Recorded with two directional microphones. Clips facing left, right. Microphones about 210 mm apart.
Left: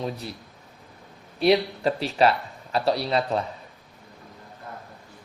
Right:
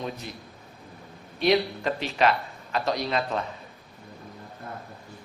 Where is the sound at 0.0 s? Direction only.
35° left (ahead or behind).